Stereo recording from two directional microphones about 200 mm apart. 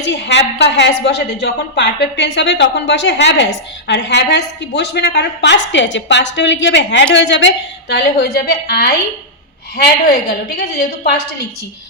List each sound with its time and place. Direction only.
0.0 s a woman's voice: 60° left (ahead or behind)